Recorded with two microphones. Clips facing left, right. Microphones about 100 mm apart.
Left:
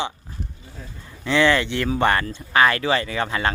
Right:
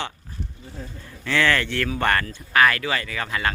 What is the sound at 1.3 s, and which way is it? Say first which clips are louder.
Speech: left 3 dB; 20° left (ahead or behind).